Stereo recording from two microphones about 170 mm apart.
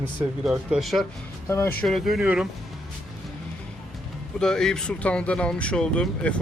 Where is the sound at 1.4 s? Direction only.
15° left (ahead or behind).